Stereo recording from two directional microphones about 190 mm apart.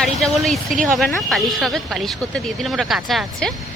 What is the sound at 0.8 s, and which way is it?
Speech, centre (ahead or behind).